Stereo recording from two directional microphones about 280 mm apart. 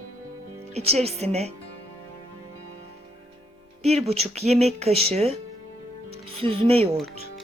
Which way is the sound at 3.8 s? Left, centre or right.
Right.